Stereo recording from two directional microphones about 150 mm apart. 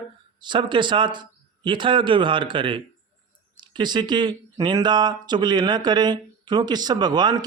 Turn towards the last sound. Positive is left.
turn(degrees=-25)  # may be behind; listen again after turning